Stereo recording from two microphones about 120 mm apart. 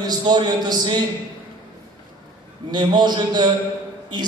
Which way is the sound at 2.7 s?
40° right (ahead or behind).